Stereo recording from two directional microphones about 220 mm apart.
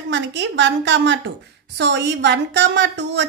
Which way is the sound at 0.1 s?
55° right (ahead or behind).